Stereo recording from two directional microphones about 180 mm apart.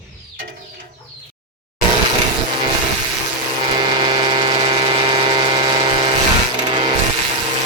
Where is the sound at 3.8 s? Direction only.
25° right (ahead or behind).